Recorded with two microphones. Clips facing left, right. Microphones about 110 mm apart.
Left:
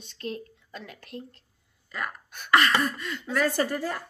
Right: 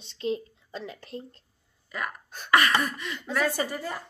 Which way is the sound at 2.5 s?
15° right (ahead or behind).